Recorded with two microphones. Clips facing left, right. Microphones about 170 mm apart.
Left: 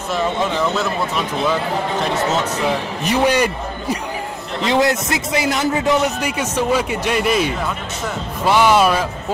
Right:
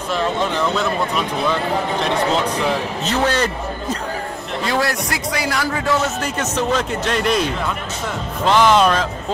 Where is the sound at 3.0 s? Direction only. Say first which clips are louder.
Left 4 dB; 10° left (ahead or behind).